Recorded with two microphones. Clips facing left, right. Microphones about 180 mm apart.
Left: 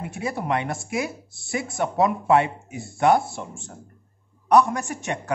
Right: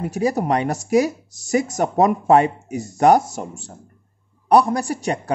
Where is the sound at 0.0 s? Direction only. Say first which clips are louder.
Right 8 dB; 40° right (ahead or behind).